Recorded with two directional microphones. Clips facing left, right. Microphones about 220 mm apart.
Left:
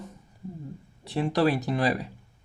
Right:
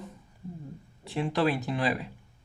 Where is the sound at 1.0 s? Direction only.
40° left (ahead or behind).